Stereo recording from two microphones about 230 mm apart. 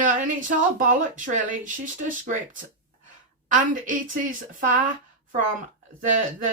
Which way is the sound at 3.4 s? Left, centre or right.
Right.